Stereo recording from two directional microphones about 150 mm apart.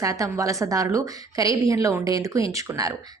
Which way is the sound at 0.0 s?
20° right (ahead or behind).